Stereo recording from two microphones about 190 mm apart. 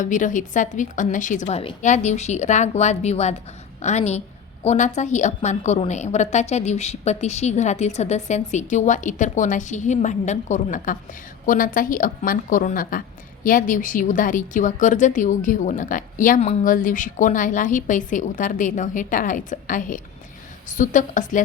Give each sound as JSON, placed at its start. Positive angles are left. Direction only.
{"t": 0.0, "sound": "a woman's voice", "side_deg": 40}